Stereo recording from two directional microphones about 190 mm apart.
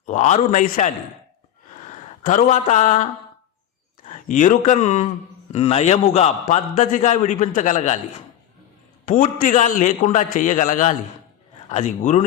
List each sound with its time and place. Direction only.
0.0 s a man's voice: 40° left (ahead or behind)
2.2 s a man's voice: 40° left (ahead or behind)
4.1 s a man's voice: 40° left (ahead or behind)